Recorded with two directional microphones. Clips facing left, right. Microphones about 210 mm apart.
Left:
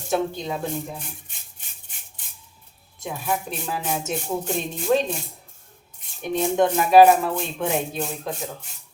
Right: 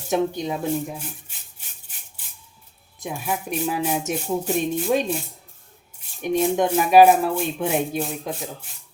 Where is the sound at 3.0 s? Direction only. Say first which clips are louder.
Even; 10° right (ahead or behind).